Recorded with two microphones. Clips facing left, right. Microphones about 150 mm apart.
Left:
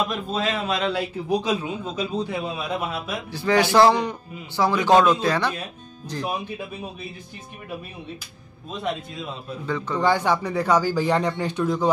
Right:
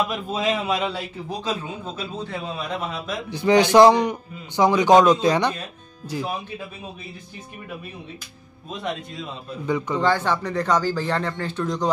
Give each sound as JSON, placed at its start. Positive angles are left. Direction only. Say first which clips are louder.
{"t": 0.3, "sound": "a man's voice", "louder": "right 2 dB", "side_deg": -15}
{"t": 1.4, "sound": "speech", "louder": "left 3 dB", "side_deg": 15}
{"t": 3.3, "sound": "a man's voice", "louder": "right 3 dB", "side_deg": -20}
{"t": 9.7, "sound": "a man's voice", "louder": "right 4 dB", "side_deg": -15}
{"t": 9.9, "sound": "speech", "louder": "left 3 dB", "side_deg": 10}